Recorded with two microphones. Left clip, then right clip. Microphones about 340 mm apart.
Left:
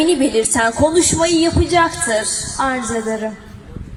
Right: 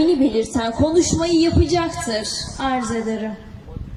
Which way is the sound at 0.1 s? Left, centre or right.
Left.